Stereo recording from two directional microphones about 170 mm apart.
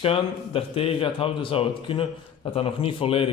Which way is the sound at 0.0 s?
35° left (ahead or behind).